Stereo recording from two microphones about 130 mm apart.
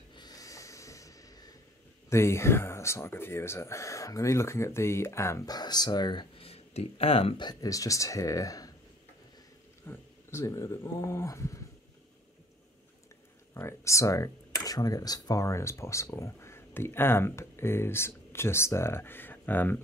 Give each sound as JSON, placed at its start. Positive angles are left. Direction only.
{"t": 0.1, "sound": "snort", "side_deg": 30}
{"t": 2.0, "sound": "speech", "side_deg": 20}
{"t": 7.4, "sound": "speech", "side_deg": 25}
{"t": 9.8, "sound": "speech", "side_deg": 20}
{"t": 13.6, "sound": "speech", "side_deg": 20}